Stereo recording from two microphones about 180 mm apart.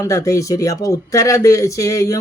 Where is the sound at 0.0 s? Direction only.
20° left (ahead or behind).